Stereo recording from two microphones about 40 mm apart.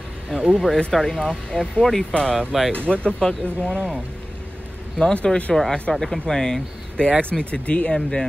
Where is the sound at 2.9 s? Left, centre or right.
Left.